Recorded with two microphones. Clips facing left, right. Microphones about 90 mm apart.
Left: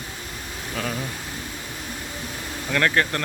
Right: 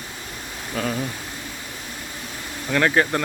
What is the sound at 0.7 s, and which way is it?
Speech, 5° right (ahead or behind).